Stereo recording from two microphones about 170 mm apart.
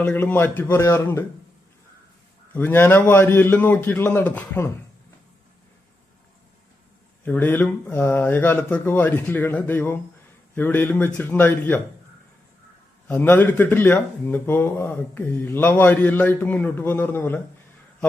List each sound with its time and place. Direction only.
0.0 s speech: 10° left (ahead or behind)
2.5 s speech: 10° left (ahead or behind)
7.3 s speech: 10° left (ahead or behind)
13.1 s speech: 10° left (ahead or behind)